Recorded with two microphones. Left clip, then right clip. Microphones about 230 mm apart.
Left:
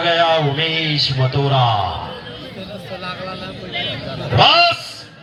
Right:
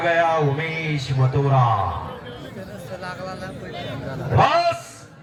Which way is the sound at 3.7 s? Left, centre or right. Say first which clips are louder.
Left 10 dB; right.